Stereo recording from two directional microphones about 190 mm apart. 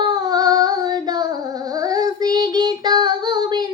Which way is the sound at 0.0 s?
20° right (ahead or behind).